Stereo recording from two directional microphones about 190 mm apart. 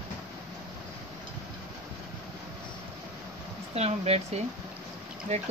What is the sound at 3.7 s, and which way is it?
Speech, 35° right (ahead or behind).